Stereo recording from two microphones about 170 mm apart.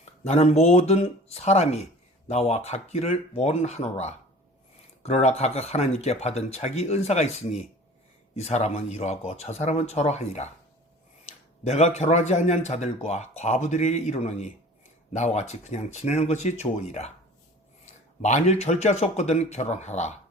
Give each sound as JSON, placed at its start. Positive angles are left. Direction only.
{"t": 0.3, "sound": "speech", "side_deg": 40}
{"t": 18.2, "sound": "speech", "side_deg": 45}